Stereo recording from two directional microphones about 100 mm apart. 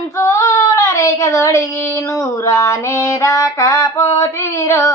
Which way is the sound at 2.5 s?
30° left (ahead or behind).